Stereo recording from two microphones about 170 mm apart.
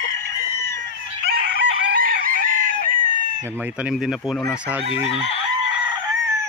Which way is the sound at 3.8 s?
5° right (ahead or behind).